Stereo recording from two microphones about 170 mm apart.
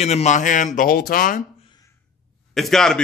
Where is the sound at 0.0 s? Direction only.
40° left (ahead or behind).